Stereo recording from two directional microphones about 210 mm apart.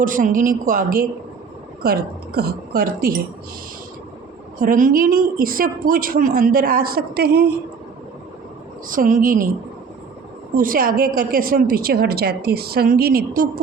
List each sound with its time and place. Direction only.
0.0 s a woman's voice: 40° right (ahead or behind)
4.6 s a woman's voice: 40° right (ahead or behind)
8.9 s a woman's voice: 40° right (ahead or behind)
10.6 s a woman's voice: 40° right (ahead or behind)